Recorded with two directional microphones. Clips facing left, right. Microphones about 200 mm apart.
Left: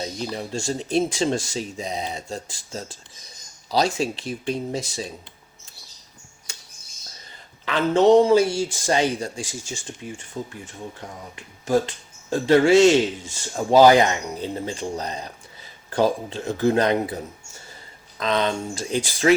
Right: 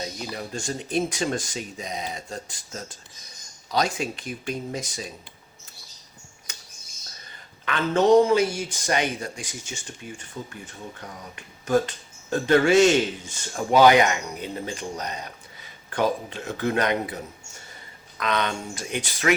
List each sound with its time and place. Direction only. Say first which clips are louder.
0.0 s speech: left 4 dB; 30° left (ahead or behind)
7.6 s speech: left 4 dB; 30° left (ahead or behind)
18.2 s speech: left 4 dB; 30° left (ahead or behind)